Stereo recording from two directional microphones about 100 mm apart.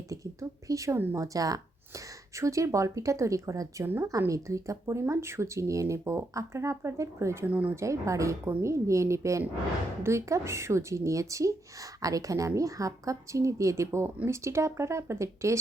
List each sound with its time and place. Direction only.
0.1 s speech: 35° right (ahead or behind)
0.9 s speech: 20° right (ahead or behind)
1.2 s speech: 35° right (ahead or behind)
3.8 s speech: 20° right (ahead or behind)
4.3 s speech: 30° right (ahead or behind)